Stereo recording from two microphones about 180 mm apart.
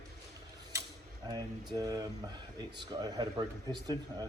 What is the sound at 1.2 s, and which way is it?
Speech, 20° right (ahead or behind).